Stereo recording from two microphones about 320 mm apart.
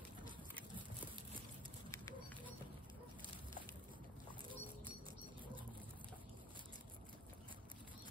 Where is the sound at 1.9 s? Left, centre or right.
Centre.